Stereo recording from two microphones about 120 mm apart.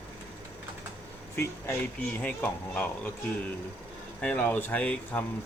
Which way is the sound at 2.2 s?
10° left (ahead or behind).